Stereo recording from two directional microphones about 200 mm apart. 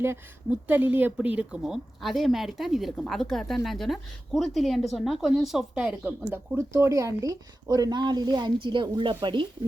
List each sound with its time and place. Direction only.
0.7 s a woman's voice: 10° right (ahead or behind); by 9.5 s 25° right (ahead or behind)